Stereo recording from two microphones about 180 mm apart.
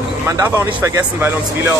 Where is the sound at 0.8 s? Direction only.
15° right (ahead or behind).